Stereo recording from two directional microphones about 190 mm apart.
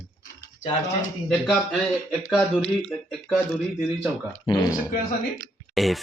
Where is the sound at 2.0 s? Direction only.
Centre (ahead or behind).